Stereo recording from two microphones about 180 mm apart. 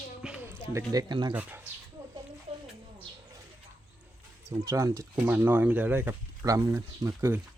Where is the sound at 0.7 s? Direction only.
20° right (ahead or behind).